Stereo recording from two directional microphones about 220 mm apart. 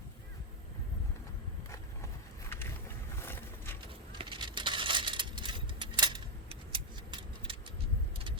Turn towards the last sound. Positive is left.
turn(degrees=-25)  # may be behind; listen again after turning